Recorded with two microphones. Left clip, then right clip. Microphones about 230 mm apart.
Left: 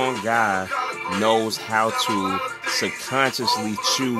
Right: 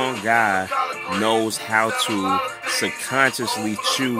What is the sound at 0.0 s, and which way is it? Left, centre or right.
Music, centre.